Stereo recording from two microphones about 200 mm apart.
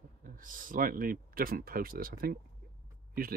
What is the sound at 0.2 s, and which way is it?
Speech, 45° right (ahead or behind).